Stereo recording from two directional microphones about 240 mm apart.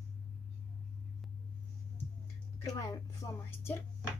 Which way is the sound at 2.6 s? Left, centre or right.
Centre.